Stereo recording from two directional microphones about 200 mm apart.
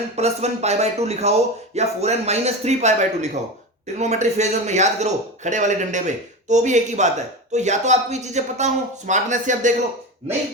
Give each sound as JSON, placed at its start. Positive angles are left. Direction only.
{"t": 0.2, "sound": "speech", "side_deg": -35}